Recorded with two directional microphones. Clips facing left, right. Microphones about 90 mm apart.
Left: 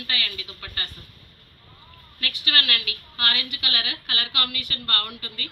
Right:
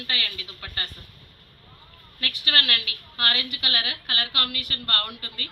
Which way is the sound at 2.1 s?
35° right (ahead or behind).